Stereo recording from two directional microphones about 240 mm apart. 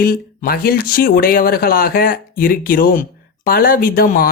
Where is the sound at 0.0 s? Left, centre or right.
Left.